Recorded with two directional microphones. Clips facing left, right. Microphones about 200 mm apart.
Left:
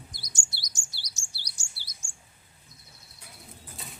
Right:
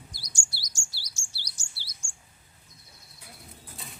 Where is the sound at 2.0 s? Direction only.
20° left (ahead or behind).